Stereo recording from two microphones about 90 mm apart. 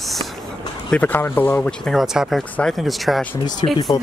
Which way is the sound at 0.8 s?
15° left (ahead or behind).